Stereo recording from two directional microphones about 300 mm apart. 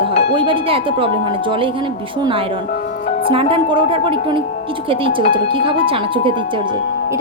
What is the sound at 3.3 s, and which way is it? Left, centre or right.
Speech, centre.